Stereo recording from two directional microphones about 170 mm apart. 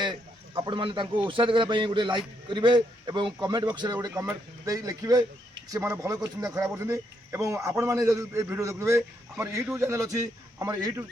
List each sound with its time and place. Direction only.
0.0 s a man's voice: 25° right (ahead or behind)